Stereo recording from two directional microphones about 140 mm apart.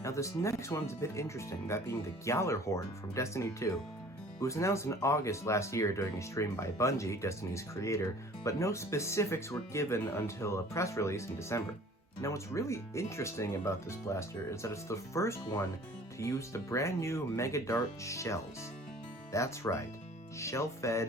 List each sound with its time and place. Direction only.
0.0 s speech: 20° left (ahead or behind)